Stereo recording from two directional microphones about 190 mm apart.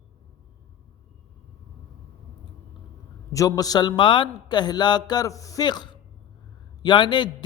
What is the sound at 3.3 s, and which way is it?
A woman's voice, 15° left (ahead or behind).